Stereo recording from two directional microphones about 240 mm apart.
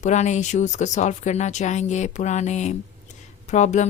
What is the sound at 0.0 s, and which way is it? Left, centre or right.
A woman's voice, left.